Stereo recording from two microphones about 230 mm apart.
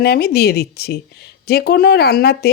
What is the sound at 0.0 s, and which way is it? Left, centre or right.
Speech, left.